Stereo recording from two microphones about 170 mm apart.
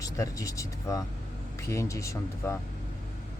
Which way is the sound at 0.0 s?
20° left (ahead or behind).